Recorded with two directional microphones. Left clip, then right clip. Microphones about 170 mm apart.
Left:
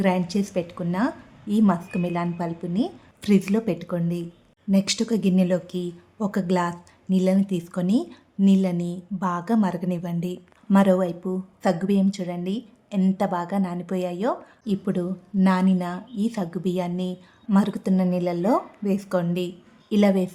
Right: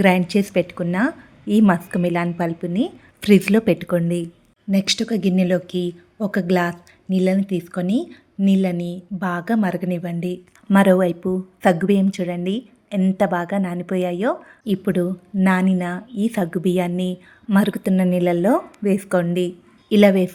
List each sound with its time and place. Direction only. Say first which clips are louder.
0.0 s a woman's voice: right 7 dB; 25° right (ahead or behind)
4.7 s a woman's voice: right 3 dB; 5° right (ahead or behind)
10.8 s a woman's voice: right 5 dB; 20° right (ahead or behind)